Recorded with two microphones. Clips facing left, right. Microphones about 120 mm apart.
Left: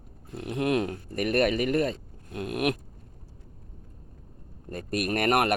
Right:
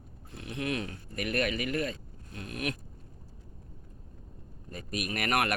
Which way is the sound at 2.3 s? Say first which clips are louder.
Left 8 dB; 60° left (ahead or behind).